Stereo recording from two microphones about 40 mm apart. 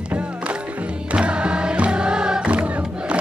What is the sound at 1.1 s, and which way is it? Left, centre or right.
Music, right.